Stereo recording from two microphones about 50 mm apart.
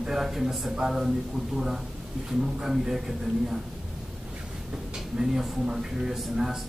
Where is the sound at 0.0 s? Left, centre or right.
Centre.